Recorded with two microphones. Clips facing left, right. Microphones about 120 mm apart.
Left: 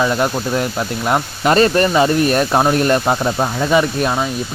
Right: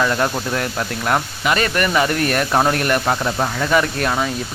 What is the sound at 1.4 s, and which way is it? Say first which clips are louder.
Speech: left 9 dB; 35° left (ahead or behind).